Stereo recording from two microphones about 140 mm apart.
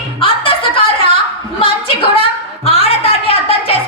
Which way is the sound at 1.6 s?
40° left (ahead or behind).